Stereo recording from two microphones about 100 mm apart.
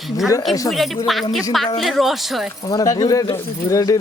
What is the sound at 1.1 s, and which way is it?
Speech, centre (ahead or behind).